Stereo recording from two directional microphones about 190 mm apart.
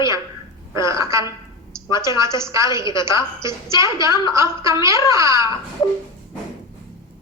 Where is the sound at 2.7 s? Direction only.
25° left (ahead or behind).